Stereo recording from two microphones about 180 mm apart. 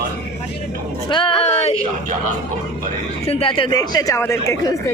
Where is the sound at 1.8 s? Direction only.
45° right (ahead or behind).